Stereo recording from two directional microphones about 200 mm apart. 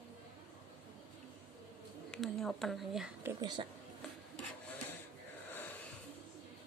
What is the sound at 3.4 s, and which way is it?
Speech, 20° right (ahead or behind).